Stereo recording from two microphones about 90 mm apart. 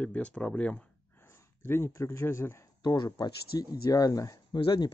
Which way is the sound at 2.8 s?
45° left (ahead or behind).